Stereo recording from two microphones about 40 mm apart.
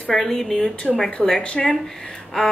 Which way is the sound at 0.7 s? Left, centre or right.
Left.